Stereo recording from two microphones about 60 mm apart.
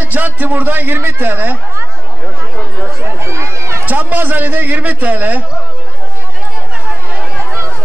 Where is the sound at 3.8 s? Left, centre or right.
Right.